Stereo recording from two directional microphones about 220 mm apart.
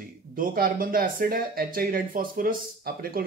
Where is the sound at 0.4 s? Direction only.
40° right (ahead or behind).